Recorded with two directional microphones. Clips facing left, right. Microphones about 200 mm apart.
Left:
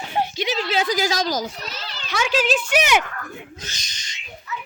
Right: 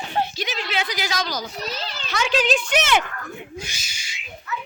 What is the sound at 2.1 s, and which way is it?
Speech, 5° left (ahead or behind).